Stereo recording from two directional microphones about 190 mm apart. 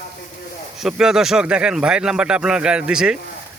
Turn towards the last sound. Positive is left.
turn(degrees=-5)  # may be behind; listen again after turning